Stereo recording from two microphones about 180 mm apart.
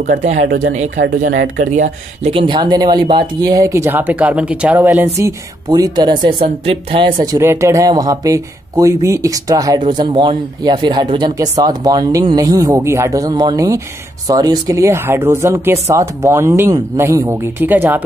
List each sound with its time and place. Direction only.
0.2 s speech: 40° right (ahead or behind)
0.9 s speech: 55° right (ahead or behind)
1.6 s speech: 45° right (ahead or behind)
2.3 s speech: 25° right (ahead or behind)
7.2 s speech: 15° right (ahead or behind)